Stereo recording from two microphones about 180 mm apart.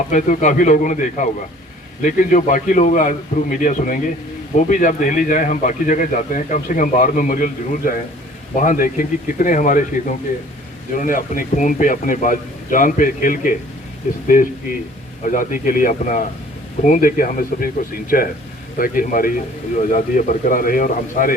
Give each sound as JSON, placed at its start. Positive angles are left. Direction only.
{"t": 0.1, "sound": "speech", "side_deg": 45}
{"t": 15.2, "sound": "speech", "side_deg": 45}